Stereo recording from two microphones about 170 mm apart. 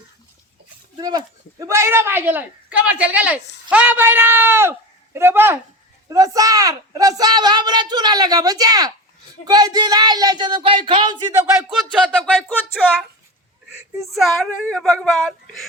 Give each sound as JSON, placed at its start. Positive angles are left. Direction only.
{"t": 0.9, "sound": "speech", "side_deg": -20}
{"t": 11.9, "sound": "a woman's voice", "side_deg": 0}
{"t": 14.2, "sound": "a woman's voice", "side_deg": 5}